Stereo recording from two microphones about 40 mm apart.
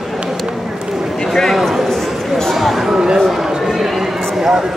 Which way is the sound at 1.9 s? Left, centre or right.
Centre.